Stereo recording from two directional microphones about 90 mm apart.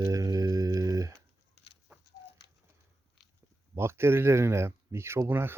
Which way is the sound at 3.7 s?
30° right (ahead or behind).